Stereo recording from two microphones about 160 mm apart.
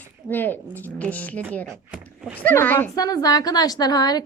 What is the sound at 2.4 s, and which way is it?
A woman's voice, 10° left (ahead or behind).